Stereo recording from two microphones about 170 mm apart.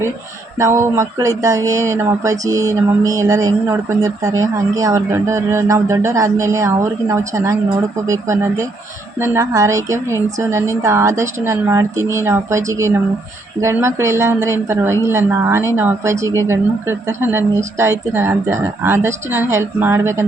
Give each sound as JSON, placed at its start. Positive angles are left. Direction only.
{"t": 0.6, "sound": "speech", "side_deg": -15}